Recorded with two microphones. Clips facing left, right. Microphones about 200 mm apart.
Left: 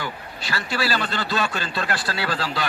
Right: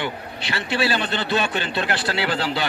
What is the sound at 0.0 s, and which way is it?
A man's voice, 25° right (ahead or behind).